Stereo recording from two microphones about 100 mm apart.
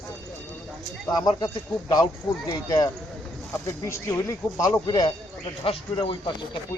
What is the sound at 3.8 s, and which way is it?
Speech, 30° left (ahead or behind).